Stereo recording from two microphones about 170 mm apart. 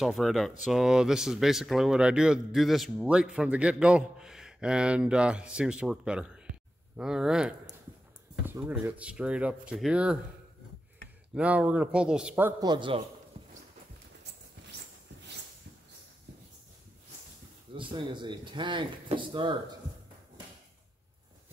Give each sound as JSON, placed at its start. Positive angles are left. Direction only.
{"t": 0.0, "sound": "speech", "side_deg": 0}
{"t": 11.3, "sound": "a man's voice", "side_deg": -5}
{"t": 12.6, "sound": "speech", "side_deg": -30}
{"t": 13.4, "sound": "clip-clop", "side_deg": -35}
{"t": 17.7, "sound": "speech", "side_deg": -30}